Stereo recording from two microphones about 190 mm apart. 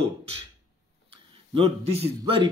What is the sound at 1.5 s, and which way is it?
Speech, 30° right (ahead or behind).